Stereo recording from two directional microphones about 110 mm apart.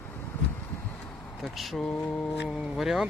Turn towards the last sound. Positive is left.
turn(degrees=-5)  # may be behind; listen again after turning